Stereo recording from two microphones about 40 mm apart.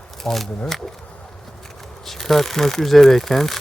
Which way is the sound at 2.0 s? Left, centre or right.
Centre.